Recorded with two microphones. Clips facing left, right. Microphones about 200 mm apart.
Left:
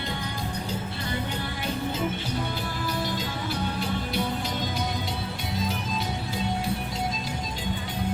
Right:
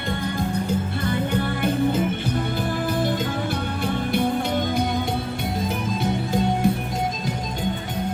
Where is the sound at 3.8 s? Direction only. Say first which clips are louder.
Right 6 dB; 55° right (ahead or behind).